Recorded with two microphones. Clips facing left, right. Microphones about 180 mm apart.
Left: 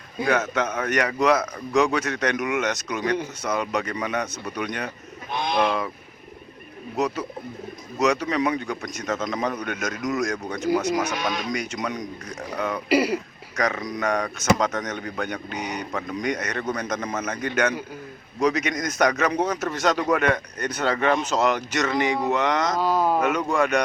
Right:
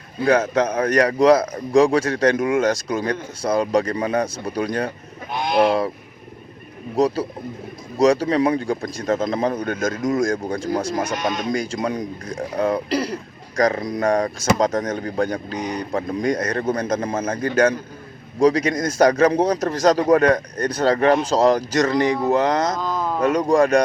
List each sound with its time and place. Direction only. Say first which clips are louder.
0.3 s a man's voice: right 6 dB; 35° right (ahead or behind)
5.3 s speech: right 3 dB; 10° right (ahead or behind)
5.5 s a man's voice: right 7 dB; 35° right (ahead or behind)
6.9 s a man's voice: right 6 dB; 35° right (ahead or behind)
11.1 s speech: right 4 dB; centre (ahead or behind)
11.4 s a man's voice: right 5 dB; 30° right (ahead or behind)
12.9 s speech: left 2 dB; 10° left (ahead or behind)
13.6 s a man's voice: right 6 dB; 35° right (ahead or behind)
22.8 s a sound: left 3 dB; 10° left (ahead or behind)
23.2 s a man's voice: right 6 dB; 35° right (ahead or behind)